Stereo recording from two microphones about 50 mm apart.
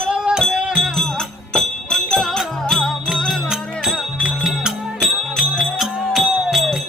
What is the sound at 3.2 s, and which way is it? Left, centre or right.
Music, centre.